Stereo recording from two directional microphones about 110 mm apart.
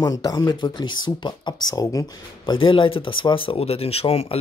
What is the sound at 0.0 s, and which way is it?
Speech, 35° left (ahead or behind).